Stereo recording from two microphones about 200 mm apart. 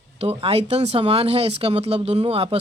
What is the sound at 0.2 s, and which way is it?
Speech, 30° right (ahead or behind).